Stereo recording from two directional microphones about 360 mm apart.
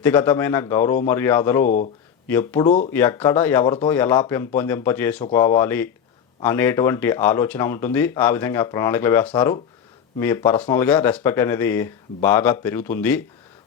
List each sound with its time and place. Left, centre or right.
0.0 s speech: centre
1.6 s speech: left
2.2 s speech: centre
2.6 s speech: centre
2.9 s speech: centre